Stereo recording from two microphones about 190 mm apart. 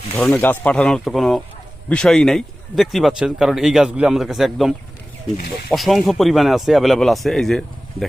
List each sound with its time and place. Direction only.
0.2 s a man's voice: 10° left (ahead or behind)
5.7 s a man's voice: centre (ahead or behind)